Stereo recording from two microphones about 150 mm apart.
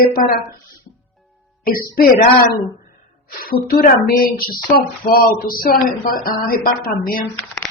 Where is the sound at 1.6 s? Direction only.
80° left.